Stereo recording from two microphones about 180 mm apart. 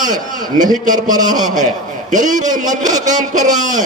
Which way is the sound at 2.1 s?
45° right (ahead or behind).